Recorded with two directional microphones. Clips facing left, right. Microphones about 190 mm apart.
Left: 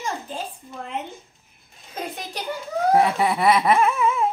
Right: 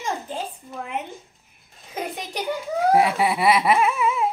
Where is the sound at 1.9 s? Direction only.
15° right (ahead or behind).